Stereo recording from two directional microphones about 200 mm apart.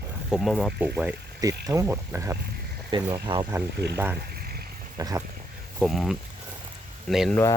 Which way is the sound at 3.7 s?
55° right (ahead or behind).